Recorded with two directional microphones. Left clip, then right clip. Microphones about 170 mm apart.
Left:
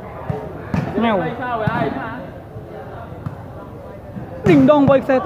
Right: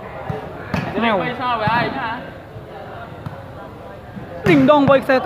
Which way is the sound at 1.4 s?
60° right (ahead or behind).